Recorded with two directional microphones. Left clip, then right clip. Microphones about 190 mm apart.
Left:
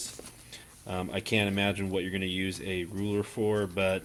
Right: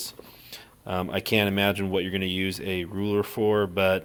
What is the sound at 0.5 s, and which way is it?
Speech, 25° right (ahead or behind).